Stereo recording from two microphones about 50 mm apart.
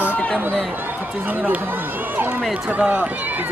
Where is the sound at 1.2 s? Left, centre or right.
Right.